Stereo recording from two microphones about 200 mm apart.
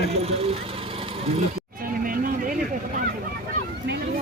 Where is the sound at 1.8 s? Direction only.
45° right (ahead or behind).